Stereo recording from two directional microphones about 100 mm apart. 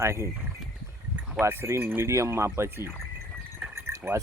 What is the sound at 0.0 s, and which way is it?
Speech, 25° right (ahead or behind).